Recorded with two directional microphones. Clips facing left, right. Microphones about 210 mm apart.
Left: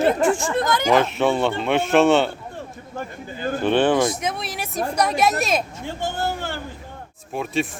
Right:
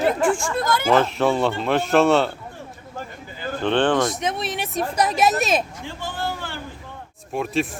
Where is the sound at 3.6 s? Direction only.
10° left (ahead or behind).